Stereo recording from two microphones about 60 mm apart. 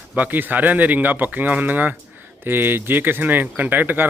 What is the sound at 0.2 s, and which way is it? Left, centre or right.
Speech, right.